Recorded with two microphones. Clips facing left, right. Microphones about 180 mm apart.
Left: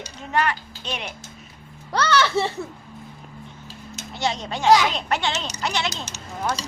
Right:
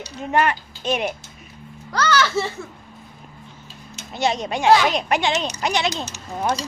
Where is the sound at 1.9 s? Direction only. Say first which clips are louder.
Even; 30° left (ahead or behind).